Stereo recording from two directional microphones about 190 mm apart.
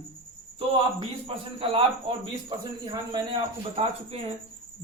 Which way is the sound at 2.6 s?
20° right (ahead or behind).